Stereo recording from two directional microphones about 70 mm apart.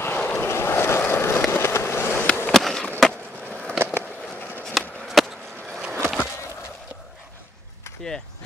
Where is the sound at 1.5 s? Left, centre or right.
Left.